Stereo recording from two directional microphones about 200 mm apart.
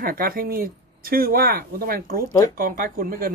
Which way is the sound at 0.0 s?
45° right (ahead or behind).